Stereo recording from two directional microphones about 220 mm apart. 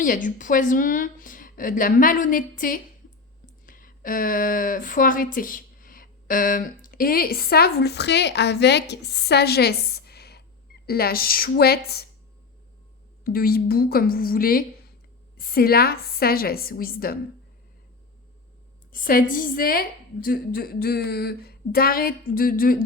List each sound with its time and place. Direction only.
0.0 s a woman's voice: 35° left (ahead or behind)
13.2 s speech: 45° left (ahead or behind)
18.9 s a woman's voice: 40° left (ahead or behind)